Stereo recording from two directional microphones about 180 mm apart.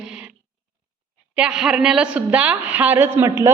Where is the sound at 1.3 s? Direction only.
5° right (ahead or behind).